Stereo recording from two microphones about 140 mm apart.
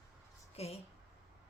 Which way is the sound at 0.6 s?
45° left (ahead or behind).